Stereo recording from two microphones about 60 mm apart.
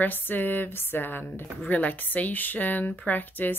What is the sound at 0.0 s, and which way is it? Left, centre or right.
Speech, left.